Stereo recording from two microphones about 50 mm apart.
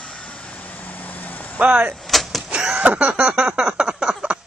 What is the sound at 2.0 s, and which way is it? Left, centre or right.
Vehicle, centre.